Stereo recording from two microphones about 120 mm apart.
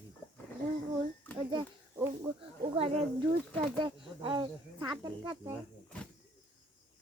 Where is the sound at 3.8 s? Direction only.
40° right (ahead or behind).